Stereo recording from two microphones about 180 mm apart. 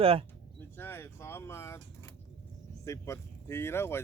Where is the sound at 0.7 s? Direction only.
10° left (ahead or behind).